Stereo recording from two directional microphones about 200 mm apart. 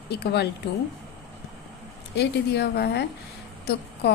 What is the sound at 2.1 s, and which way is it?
A woman's voice, 55° left (ahead or behind).